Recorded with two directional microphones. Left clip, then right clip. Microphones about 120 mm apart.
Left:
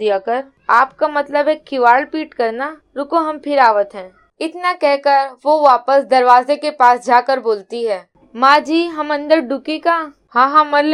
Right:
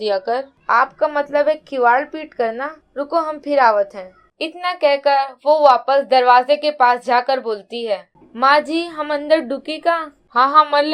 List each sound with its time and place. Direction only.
0.0 s a woman's voice: 35° left (ahead or behind)